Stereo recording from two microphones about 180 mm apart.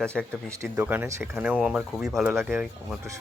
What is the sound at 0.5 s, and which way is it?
Speech, 15° right (ahead or behind).